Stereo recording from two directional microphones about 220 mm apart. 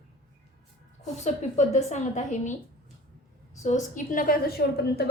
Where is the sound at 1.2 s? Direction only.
30° left (ahead or behind).